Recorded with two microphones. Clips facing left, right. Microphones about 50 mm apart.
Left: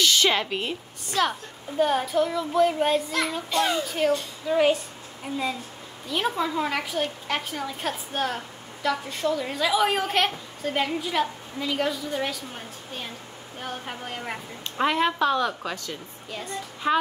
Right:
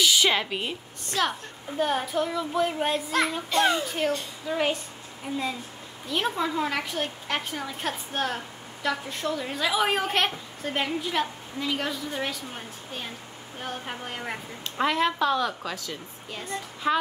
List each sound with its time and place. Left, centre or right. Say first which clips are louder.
0.0 s a woman's voice: left 1 dB; centre
3.5 s a child's voice: right 1 dB; right
3.8 s a woman's voice: left 3 dB; centre